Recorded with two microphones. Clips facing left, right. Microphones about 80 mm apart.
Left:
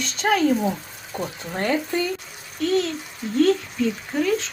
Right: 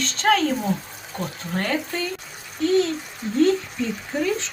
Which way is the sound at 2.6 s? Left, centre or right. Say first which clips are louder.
Right 2 dB; centre.